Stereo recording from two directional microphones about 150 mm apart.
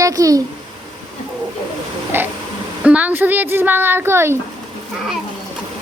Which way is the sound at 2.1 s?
15° right (ahead or behind).